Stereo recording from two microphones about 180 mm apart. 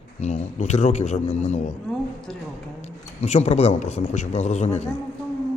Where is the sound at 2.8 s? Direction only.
40° left (ahead or behind).